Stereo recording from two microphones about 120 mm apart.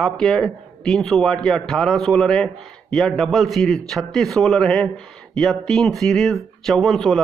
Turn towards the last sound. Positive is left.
turn(degrees=5)  # may be behind; listen again after turning